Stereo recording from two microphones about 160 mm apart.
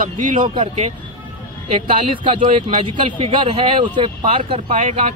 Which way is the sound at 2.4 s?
40° right (ahead or behind).